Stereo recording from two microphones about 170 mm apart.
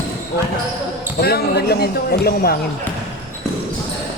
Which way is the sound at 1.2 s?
70° left (ahead or behind).